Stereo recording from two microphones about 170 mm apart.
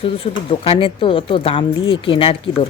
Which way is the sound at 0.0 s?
35° left (ahead or behind).